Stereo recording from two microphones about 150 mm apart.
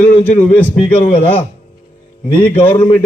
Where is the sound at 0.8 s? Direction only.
35° left (ahead or behind).